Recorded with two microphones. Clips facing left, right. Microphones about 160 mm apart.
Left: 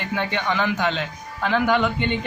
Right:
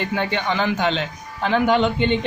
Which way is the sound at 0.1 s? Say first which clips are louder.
Right 2 dB; 30° right (ahead or behind).